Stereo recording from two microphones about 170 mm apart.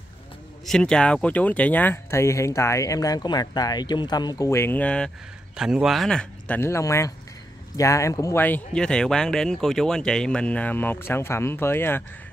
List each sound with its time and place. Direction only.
0.7 s speech: 5° left (ahead or behind)